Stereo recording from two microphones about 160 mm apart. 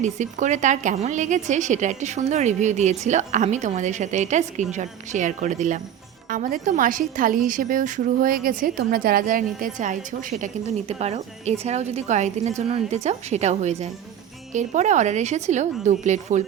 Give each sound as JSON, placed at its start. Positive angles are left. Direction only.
{"t": 0.0, "sound": "a woman's voice", "side_deg": -50}